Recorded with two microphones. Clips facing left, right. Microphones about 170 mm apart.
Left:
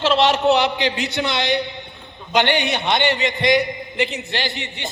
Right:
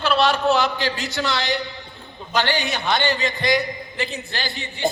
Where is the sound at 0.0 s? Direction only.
20° left (ahead or behind).